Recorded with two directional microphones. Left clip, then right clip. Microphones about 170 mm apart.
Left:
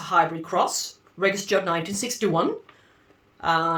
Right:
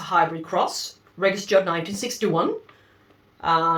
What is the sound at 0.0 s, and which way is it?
Speech, 25° left (ahead or behind).